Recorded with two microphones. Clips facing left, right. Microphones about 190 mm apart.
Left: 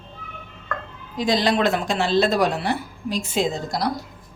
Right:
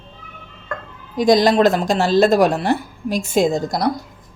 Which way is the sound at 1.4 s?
40° right (ahead or behind).